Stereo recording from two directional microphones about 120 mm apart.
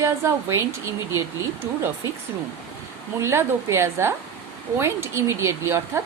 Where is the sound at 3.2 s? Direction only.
20° right (ahead or behind).